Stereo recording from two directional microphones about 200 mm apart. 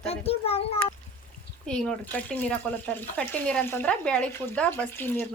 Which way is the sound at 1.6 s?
5° left (ahead or behind).